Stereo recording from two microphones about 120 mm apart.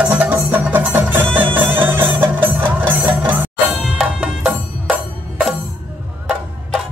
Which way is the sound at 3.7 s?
5° right (ahead or behind).